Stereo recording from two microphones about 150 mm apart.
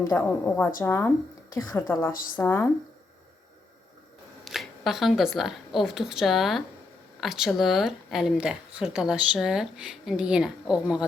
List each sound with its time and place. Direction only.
0.1 s a woman's voice: 10° left (ahead or behind)
4.4 s a woman's voice: centre (ahead or behind)